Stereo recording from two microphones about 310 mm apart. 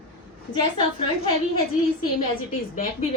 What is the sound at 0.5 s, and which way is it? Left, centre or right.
Speech, centre.